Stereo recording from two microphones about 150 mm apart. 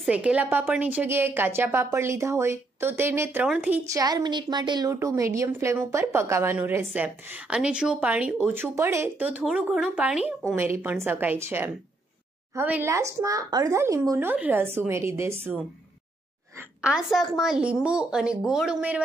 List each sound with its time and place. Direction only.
0.0 s a woman's voice: 10° right (ahead or behind)
3.8 s a woman's voice: 25° right (ahead or behind)
16.5 s a woman's voice: 5° right (ahead or behind)